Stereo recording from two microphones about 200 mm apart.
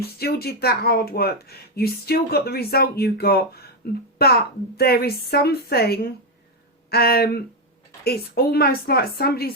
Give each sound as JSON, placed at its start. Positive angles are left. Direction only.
{"t": 0.2, "sound": "speech", "side_deg": 50}